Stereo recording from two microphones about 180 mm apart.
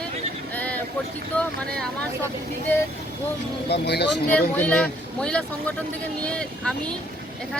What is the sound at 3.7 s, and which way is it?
Speech, 70° left (ahead or behind).